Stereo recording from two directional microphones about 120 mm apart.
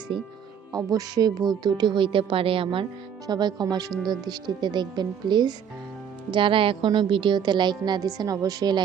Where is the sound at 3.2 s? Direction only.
35° right (ahead or behind).